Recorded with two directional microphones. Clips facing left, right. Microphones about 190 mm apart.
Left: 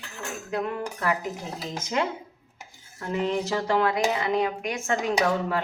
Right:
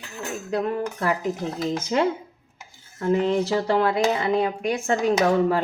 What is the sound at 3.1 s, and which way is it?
A woman's voice, 35° right (ahead or behind).